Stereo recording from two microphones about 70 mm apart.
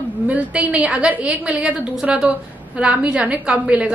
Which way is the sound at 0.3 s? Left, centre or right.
Centre.